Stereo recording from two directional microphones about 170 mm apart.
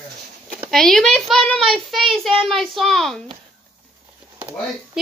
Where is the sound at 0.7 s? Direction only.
Centre (ahead or behind).